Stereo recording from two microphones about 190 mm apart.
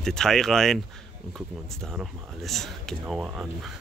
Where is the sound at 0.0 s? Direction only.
Centre (ahead or behind).